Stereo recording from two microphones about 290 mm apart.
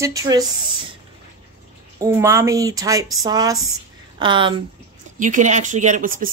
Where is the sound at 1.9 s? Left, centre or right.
Centre.